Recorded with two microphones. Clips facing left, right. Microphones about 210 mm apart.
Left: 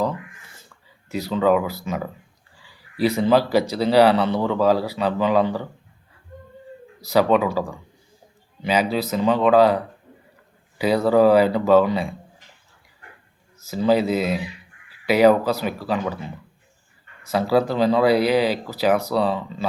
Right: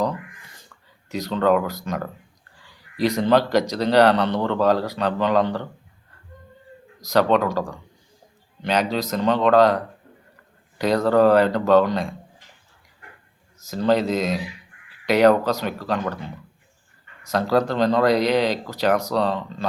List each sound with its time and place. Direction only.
1.1 s speech: 5° left (ahead or behind)
7.0 s speech: 5° left (ahead or behind)
13.7 s speech: 5° left (ahead or behind)